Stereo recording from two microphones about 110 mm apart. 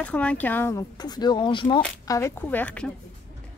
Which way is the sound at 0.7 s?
40° left (ahead or behind).